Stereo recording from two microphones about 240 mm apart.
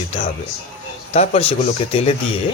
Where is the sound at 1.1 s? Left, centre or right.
Left.